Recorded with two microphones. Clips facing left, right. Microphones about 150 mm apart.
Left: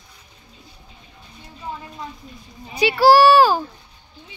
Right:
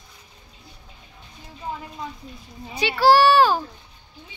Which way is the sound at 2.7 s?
10° left (ahead or behind).